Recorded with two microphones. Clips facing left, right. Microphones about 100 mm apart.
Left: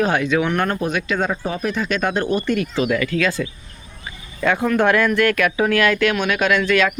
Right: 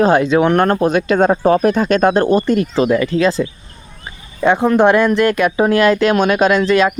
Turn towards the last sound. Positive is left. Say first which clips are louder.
# right 5 dB
turn(degrees=-30)  # may be behind; listen again after turning